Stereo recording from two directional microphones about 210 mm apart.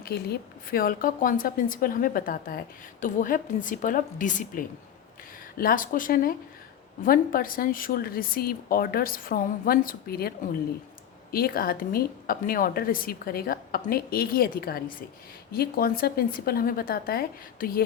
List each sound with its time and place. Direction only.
0.0 s a woman's voice: 50° left (ahead or behind)